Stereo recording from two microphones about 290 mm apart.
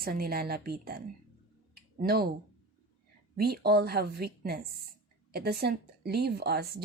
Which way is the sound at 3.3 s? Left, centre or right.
Right.